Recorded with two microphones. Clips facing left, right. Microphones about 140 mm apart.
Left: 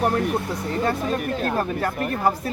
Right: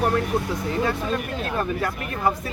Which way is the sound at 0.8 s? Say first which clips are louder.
Left 2 dB; 45° left (ahead or behind).